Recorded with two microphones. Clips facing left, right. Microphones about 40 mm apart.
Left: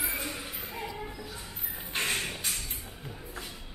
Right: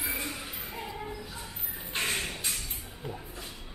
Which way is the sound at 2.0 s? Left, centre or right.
Centre.